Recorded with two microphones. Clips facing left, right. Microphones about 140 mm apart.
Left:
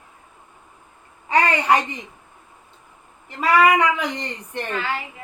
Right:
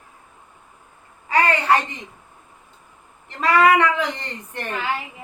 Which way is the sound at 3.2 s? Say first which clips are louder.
Even; 10° left (ahead or behind).